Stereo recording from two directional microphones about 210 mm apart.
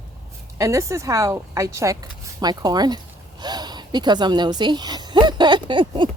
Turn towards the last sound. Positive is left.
turn(degrees=-20)  # may be behind; listen again after turning